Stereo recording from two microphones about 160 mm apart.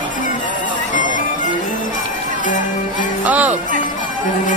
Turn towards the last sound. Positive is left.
turn(degrees=-10)  # may be behind; listen again after turning